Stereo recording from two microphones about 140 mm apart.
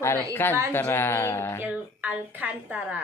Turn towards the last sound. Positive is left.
turn(degrees=-10)  # may be behind; listen again after turning